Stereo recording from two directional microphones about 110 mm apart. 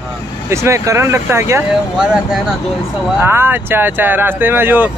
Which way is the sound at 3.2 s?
20° right (ahead or behind).